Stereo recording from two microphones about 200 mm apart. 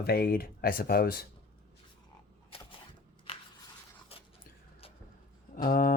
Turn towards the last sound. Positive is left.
turn(degrees=45)  # may be behind; listen again after turning